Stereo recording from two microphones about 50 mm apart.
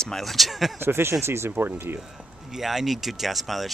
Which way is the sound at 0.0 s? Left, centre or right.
Centre.